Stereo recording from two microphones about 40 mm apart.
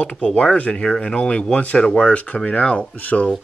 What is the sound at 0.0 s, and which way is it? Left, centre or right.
Speech, left.